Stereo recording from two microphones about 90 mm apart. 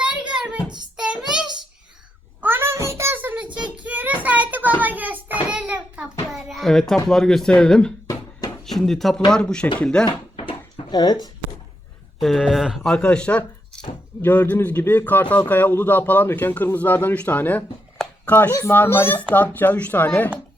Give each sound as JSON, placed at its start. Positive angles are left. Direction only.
{"t": 0.0, "sound": "music", "side_deg": -10}
{"t": 0.9, "sound": "child singing", "side_deg": -10}
{"t": 2.4, "sound": "a sound", "side_deg": -25}
{"t": 6.2, "sound": "speech", "side_deg": 0}
{"t": 10.1, "sound": "a sound", "side_deg": 85}
{"t": 10.9, "sound": "speech", "side_deg": 50}
{"t": 12.2, "sound": "speech", "side_deg": -5}
{"t": 12.9, "sound": "a man's voice", "side_deg": 10}